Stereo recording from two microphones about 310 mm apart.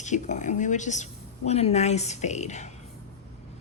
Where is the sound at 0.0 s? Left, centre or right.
Left.